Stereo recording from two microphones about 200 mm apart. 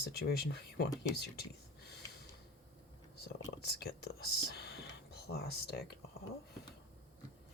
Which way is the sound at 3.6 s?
55° left (ahead or behind).